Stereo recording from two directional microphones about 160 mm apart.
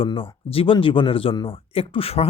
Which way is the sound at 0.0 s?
35° left (ahead or behind).